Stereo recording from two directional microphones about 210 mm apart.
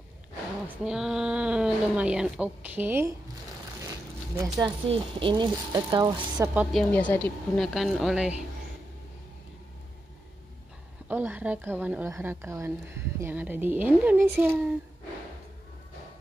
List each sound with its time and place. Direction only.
0.8 s speech: 5° right (ahead or behind)
4.4 s speech: 20° right (ahead or behind)
6.4 s a woman's voice: 10° right (ahead or behind)
6.8 s speech: 5° left (ahead or behind)
11.1 s a woman's voice: 10° right (ahead or behind)